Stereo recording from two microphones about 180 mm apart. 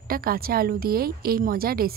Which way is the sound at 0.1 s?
55° right (ahead or behind).